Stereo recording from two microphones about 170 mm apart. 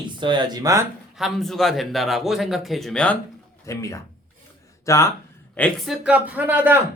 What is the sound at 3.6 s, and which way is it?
Speech, 20° left (ahead or behind).